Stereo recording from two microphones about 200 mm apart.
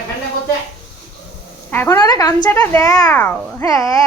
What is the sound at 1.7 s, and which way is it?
A child's voice, 10° left (ahead or behind).